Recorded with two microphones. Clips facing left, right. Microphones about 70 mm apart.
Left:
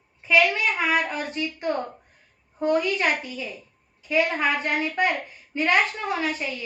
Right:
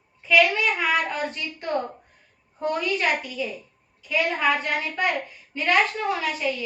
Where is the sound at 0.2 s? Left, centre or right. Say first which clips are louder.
Right 1 dB; left.